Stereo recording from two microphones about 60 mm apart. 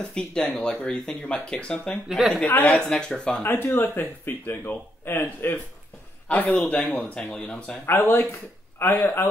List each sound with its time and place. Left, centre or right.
0.0 s speech: centre
2.0 s speech: centre
2.4 s speech: left
2.7 s speech: centre
3.4 s speech: left
6.2 s a man's voice: left
7.8 s speech: left